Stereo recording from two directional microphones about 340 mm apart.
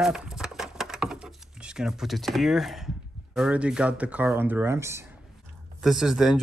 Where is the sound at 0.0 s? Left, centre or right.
Centre.